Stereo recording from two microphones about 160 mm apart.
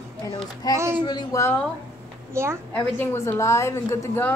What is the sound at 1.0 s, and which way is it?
Speech, 25° left (ahead or behind).